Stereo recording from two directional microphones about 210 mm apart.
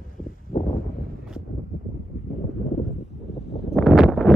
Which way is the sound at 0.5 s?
40° left (ahead or behind).